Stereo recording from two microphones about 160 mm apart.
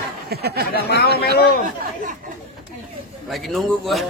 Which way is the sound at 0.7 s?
85° left.